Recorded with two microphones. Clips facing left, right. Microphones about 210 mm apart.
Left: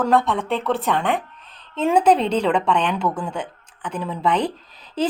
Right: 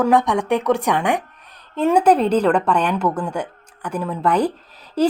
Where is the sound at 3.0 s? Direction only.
5° left (ahead or behind).